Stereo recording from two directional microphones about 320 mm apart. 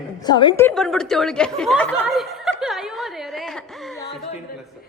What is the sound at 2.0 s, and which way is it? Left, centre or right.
Snicker, centre.